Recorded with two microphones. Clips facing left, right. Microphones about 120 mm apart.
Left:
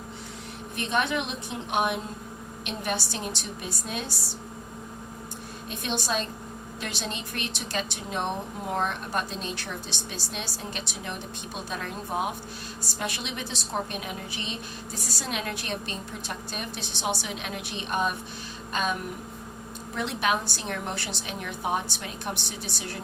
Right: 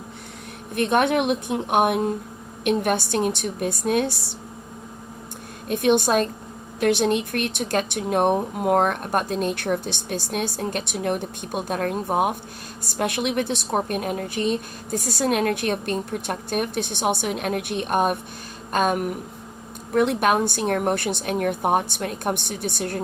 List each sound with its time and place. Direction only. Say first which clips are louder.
0.8 s a woman's voice: right 8 dB; 55° right (ahead or behind)
5.6 s a woman's voice: right 12 dB; 60° right (ahead or behind)
18.7 s a sound: right 8 dB; 50° right (ahead or behind)
19.9 s a woman's voice: right 8 dB; 55° right (ahead or behind)